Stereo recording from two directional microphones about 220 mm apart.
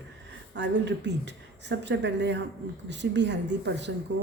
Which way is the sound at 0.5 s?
55° right (ahead or behind).